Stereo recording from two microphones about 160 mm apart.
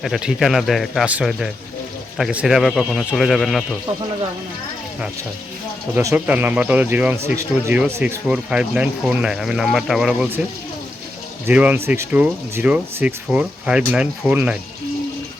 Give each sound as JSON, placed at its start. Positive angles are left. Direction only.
{"t": 0.0, "sound": "speech", "side_deg": 0}
{"t": 5.9, "sound": "speech", "side_deg": -20}
{"t": 11.4, "sound": "speech", "side_deg": -10}